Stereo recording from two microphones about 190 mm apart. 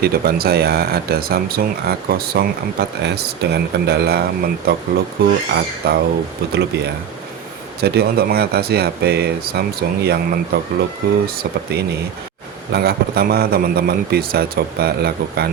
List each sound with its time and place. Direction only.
0.0 s a man's voice: 55° right (ahead or behind)